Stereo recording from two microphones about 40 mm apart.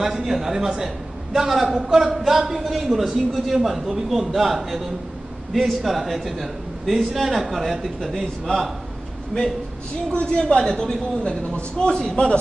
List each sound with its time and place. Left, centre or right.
0.0 s a man's voice: centre
10.1 s a man's voice: left